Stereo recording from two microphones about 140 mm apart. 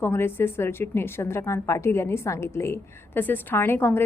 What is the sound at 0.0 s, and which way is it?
A woman's voice, 15° left (ahead or behind).